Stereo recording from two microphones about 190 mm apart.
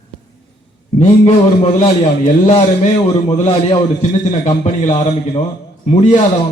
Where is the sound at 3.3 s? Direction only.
25° left (ahead or behind).